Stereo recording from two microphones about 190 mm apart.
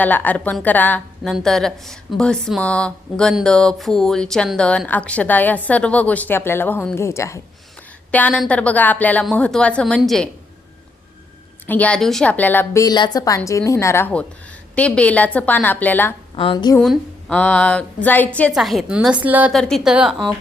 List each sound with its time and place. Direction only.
0.0 s a woman's voice: 10° left (ahead or behind)
11.6 s a woman's voice: 10° left (ahead or behind)
16.3 s a woman's voice: 25° left (ahead or behind)
16.7 s a woman's voice: 5° left (ahead or behind)